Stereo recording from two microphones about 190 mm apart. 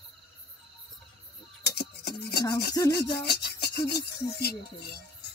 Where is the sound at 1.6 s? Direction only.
55° left (ahead or behind).